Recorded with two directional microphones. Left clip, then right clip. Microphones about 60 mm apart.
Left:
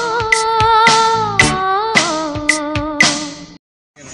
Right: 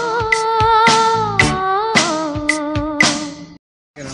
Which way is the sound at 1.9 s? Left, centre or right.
Right.